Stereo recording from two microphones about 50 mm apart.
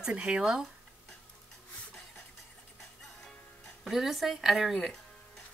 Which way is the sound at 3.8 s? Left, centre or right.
Centre.